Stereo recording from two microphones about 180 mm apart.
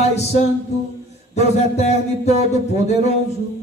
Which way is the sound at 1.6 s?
40° left (ahead or behind).